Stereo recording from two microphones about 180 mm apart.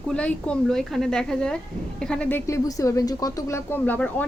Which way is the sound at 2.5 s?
20° left (ahead or behind).